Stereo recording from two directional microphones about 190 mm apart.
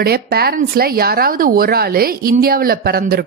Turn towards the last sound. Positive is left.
turn(degrees=-55)  # may be behind; listen again after turning